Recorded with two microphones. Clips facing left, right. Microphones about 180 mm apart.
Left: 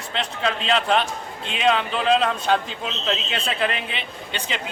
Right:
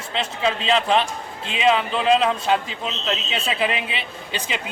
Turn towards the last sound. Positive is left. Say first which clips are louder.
# right 1 dB
turn(degrees=-5)  # may be behind; listen again after turning